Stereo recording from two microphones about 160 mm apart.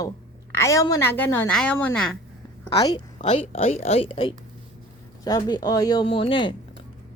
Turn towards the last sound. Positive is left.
turn(degrees=30)  # may be behind; listen again after turning